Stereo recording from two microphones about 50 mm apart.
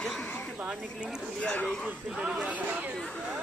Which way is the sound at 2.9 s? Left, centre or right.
Centre.